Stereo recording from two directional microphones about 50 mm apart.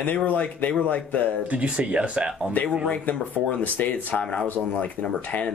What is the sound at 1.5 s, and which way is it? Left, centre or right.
Speech, right.